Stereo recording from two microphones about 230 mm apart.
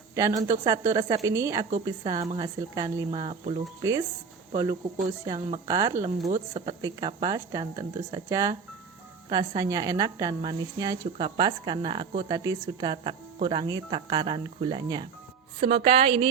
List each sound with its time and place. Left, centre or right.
0.1 s a woman's voice: centre
3.1 s speech: right
3.8 s a woman's voice: centre